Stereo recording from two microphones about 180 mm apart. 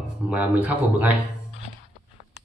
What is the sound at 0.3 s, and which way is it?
Speech, 10° right (ahead or behind).